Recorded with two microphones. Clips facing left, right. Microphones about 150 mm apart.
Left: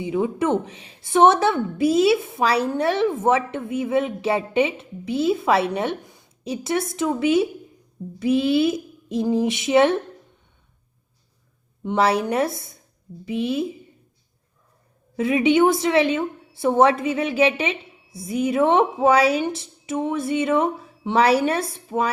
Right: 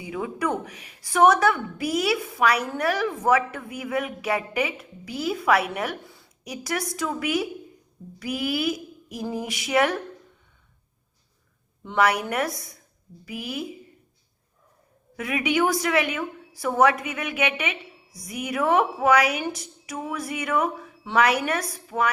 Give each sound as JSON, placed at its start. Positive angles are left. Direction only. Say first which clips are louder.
{"t": 0.0, "sound": "a woman's voice", "louder": "left 6 dB", "side_deg": 25}
{"t": 11.8, "sound": "a woman's voice", "louder": "left 3 dB", "side_deg": 25}
{"t": 15.1, "sound": "a woman's voice", "louder": "left 7 dB", "side_deg": 25}